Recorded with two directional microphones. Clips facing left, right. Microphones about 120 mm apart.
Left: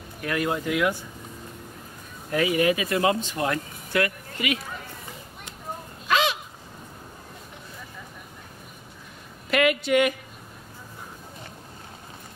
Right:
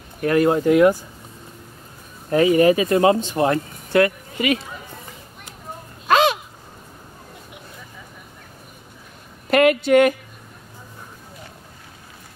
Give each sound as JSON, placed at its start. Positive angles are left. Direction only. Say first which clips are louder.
{"t": 0.2, "sound": "speech", "louder": "right 10 dB", "side_deg": -40}
{"t": 2.3, "sound": "speech", "louder": "right 8 dB", "side_deg": -35}
{"t": 6.0, "sound": "a sound", "louder": "right 7 dB", "side_deg": -50}
{"t": 9.5, "sound": "a woman's voice", "louder": "right 7 dB", "side_deg": -45}